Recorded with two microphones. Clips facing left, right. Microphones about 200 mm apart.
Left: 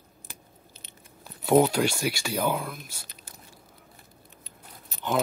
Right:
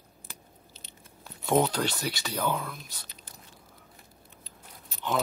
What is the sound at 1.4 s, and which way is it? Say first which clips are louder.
Speech: left 5 dB; 10° left (ahead or behind).